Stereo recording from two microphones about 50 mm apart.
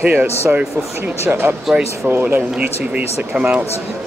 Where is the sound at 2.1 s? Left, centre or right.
Right.